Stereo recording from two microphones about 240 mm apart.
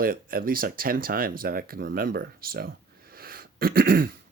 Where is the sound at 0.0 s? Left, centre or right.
Right.